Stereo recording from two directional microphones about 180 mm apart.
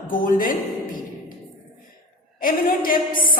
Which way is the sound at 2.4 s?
50° left (ahead or behind).